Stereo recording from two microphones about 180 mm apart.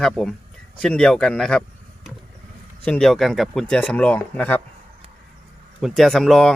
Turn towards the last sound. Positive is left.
turn(degrees=5)  # may be behind; listen again after turning